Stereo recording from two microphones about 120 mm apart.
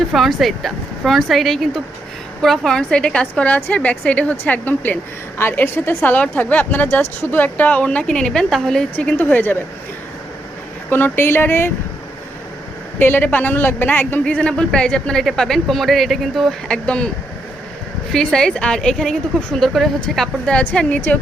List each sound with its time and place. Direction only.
0.1 s speech: centre (ahead or behind); by 9.6 s 15° left (ahead or behind)
10.8 s speech: 15° left (ahead or behind)
13.0 s speech: 15° left (ahead or behind)
18.1 s speech: 5° left (ahead or behind)